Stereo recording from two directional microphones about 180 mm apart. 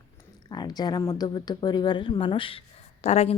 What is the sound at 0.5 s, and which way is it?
Speech, 20° left (ahead or behind).